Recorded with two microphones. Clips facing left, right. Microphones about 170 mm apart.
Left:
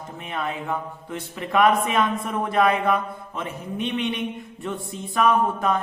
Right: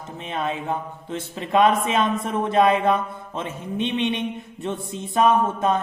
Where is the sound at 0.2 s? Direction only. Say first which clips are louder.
Right 3 dB; 20° right (ahead or behind).